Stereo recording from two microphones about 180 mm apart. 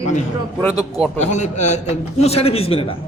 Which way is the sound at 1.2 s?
40° left (ahead or behind).